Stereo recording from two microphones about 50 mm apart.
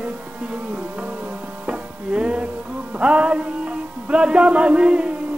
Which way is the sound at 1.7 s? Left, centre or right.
Right.